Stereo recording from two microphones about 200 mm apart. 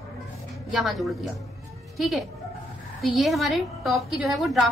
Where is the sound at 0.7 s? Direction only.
Centre (ahead or behind).